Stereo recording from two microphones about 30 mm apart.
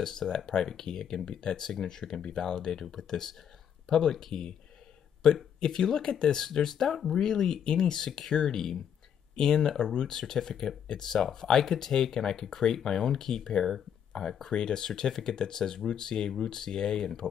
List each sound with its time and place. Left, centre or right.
0.0 s speech: centre
5.9 s speech: left